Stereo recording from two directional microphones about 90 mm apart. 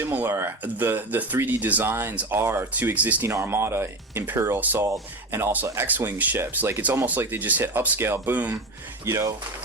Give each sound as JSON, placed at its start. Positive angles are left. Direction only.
{"t": 0.0, "sound": "speech", "side_deg": -25}
{"t": 9.0, "sound": "speech", "side_deg": -35}